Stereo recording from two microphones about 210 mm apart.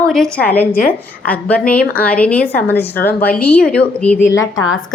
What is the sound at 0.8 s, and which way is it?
Speech, 45° left (ahead or behind).